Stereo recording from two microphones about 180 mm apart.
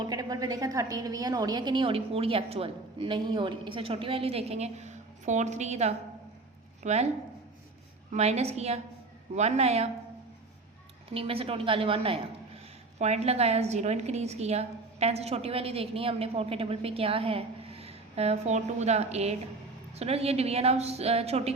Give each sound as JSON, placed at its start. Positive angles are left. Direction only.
{"t": 0.0, "sound": "a woman's voice", "side_deg": -20}
{"t": 8.1, "sound": "a woman's voice", "side_deg": -35}
{"t": 11.1, "sound": "a woman's voice", "side_deg": -30}